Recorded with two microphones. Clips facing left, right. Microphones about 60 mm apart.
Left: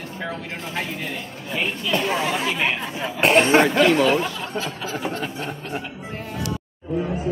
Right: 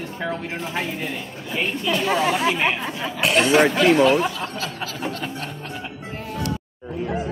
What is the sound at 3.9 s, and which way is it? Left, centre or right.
Speech, right.